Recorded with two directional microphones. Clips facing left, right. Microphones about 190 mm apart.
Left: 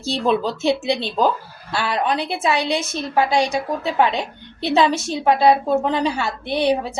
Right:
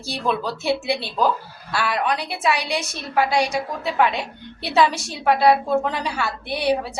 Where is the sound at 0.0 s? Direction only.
25° left (ahead or behind).